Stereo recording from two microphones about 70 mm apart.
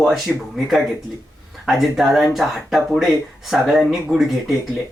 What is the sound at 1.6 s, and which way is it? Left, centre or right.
Speech, centre.